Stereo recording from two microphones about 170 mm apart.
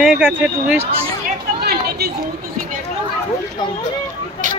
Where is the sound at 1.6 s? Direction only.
70° right (ahead or behind).